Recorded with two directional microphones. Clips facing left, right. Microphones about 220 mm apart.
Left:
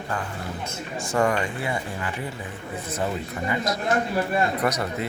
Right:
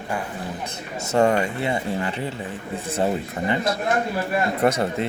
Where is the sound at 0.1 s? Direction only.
15° right (ahead or behind).